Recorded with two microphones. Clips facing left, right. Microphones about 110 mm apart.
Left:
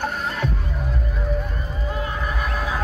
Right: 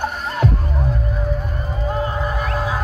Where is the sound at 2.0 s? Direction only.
30° right (ahead or behind).